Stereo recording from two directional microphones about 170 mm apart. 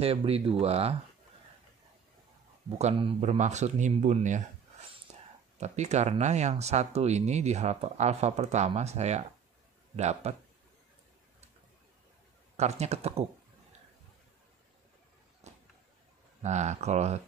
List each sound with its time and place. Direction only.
0.0 s speech: 35° right (ahead or behind)
2.8 s speech: 35° right (ahead or behind)
5.6 s speech: 40° right (ahead or behind)
12.5 s speech: 40° right (ahead or behind)
15.4 s a sound: 40° right (ahead or behind)
16.4 s speech: 45° right (ahead or behind)